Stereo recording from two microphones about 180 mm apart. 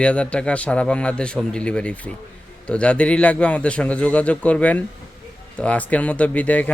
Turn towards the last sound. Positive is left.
turn(degrees=10)  # may be behind; listen again after turning